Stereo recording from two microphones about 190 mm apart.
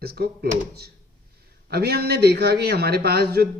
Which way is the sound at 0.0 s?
55° right (ahead or behind).